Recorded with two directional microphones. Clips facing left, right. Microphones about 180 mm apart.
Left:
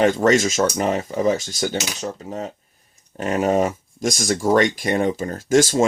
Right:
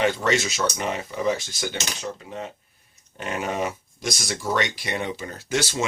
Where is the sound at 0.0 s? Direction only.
45° left (ahead or behind).